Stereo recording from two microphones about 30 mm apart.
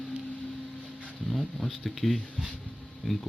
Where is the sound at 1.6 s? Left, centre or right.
Centre.